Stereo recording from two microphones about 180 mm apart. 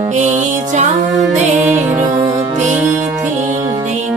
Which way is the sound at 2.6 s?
40° right (ahead or behind).